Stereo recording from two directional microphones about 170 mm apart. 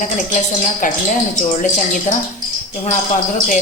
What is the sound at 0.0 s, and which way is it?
Speech, 50° left (ahead or behind).